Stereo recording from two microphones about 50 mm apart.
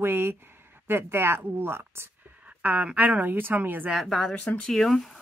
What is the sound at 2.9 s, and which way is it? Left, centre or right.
Speech, right.